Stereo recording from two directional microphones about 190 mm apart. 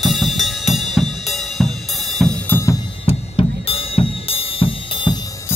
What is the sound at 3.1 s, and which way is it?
Drum kit, 30° left (ahead or behind).